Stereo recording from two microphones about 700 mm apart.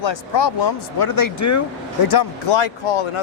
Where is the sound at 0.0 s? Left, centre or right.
Left.